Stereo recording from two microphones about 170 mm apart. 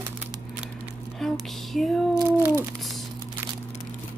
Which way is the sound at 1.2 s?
Centre (ahead or behind).